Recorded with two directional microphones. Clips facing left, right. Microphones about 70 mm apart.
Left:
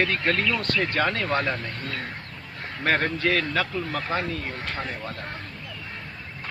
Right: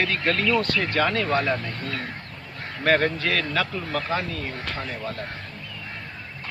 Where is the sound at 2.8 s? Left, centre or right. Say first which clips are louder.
Right 2 dB; centre.